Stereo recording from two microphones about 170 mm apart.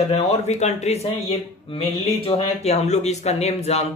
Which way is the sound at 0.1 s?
40° left (ahead or behind).